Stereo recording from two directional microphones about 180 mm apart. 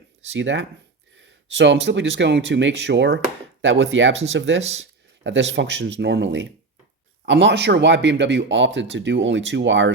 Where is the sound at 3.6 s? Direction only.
90° right.